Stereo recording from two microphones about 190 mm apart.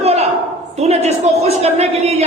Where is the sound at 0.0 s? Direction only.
35° right (ahead or behind).